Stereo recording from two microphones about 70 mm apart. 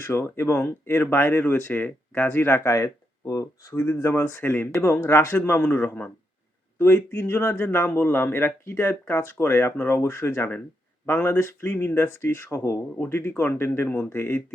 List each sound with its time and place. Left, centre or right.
0.0 s speech: left
3.8 s speech: left